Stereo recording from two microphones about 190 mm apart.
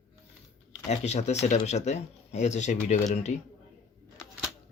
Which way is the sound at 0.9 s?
35° left (ahead or behind).